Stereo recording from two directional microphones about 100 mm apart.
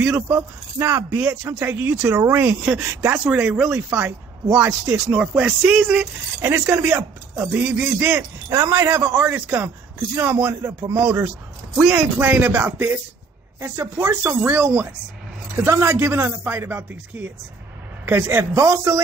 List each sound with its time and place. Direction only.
0.0 s speech: 15° right (ahead or behind)
0.7 s a man's voice: 25° right (ahead or behind)
1.2 s a man's voice: 15° right (ahead or behind)
2.1 s a man's voice: 30° right (ahead or behind)
2.8 s speech: 20° right (ahead or behind)
6.4 s a man's voice: 20° right (ahead or behind)
11.8 s a man's voice: 5° right (ahead or behind); by 17.0 s 20° right (ahead or behind)
18.0 s a man's voice: 20° right (ahead or behind)